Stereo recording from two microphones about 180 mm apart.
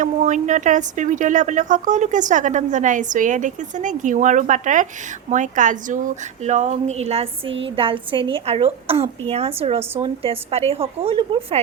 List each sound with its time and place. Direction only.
0.0 s a woman's voice: 45° right (ahead or behind)